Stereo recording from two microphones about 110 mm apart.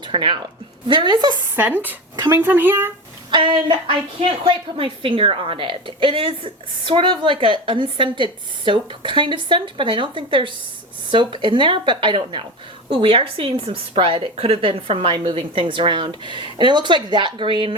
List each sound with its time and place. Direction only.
0.1 s a woman's voice: 50° right (ahead or behind)
1.5 s speech: 15° right (ahead or behind)
3.3 s a woman's voice: 45° right (ahead or behind)